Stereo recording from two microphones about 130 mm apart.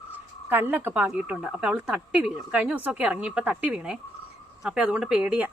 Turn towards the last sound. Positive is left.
turn(degrees=-10)  # may be behind; listen again after turning